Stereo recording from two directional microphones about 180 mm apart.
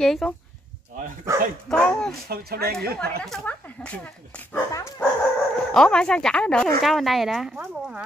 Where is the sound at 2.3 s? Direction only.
60° right (ahead or behind).